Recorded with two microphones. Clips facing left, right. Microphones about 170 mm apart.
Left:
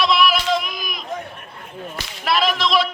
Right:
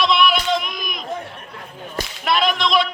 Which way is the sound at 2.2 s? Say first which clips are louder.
Even; centre (ahead or behind).